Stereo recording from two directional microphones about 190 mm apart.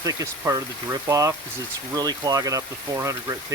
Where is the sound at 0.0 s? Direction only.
20° right (ahead or behind).